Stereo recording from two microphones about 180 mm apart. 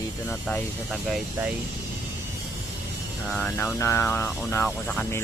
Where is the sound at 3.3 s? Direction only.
10° left (ahead or behind).